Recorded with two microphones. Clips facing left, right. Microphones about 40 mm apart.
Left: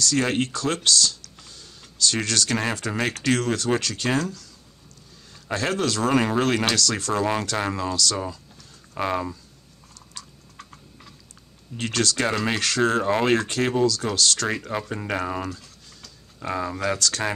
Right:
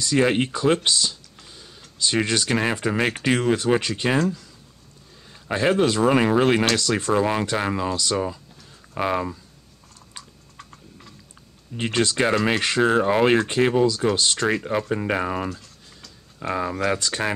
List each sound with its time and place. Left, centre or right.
0.0 s speech: centre
5.5 s speech: right
10.6 s typing: centre
11.7 s speech: right